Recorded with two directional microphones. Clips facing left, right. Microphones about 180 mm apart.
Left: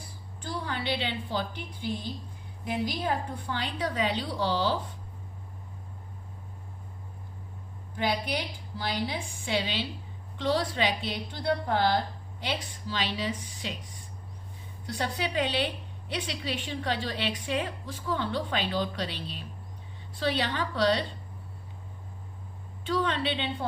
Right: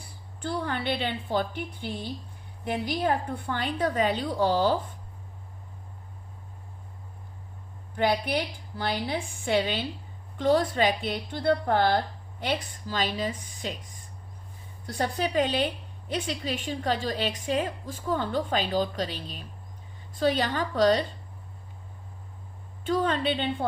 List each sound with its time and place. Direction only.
0.4 s a woman's voice: 55° right (ahead or behind)
8.8 s a woman's voice: 55° right (ahead or behind)
14.8 s a woman's voice: 50° right (ahead or behind)
22.9 s a woman's voice: 45° right (ahead or behind)